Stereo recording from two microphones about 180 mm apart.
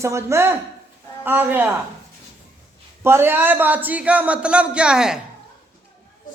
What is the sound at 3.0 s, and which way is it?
Speech, 15° right (ahead or behind).